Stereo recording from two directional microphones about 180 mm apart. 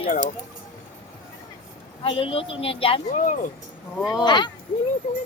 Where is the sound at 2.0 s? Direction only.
30° left (ahead or behind).